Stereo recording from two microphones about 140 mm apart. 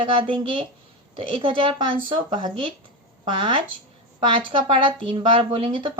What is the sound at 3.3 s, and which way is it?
Speech, 40° right (ahead or behind).